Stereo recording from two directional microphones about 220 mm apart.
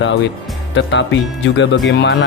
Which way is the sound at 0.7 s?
55° left (ahead or behind).